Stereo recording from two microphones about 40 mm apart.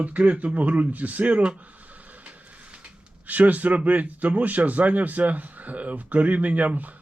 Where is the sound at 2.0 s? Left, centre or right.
Right.